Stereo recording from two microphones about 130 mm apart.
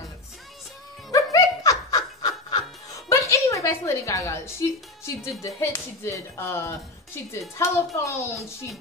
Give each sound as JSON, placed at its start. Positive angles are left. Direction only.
{"t": 1.1, "sound": "laughter", "side_deg": 25}
{"t": 3.1, "sound": "a woman's voice", "side_deg": 25}